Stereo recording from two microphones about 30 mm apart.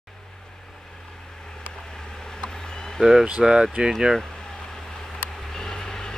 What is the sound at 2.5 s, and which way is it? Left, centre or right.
Vehicle, left.